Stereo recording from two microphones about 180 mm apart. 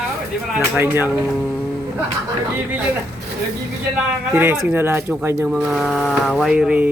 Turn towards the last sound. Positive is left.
turn(degrees=-5)  # may be behind; listen again after turning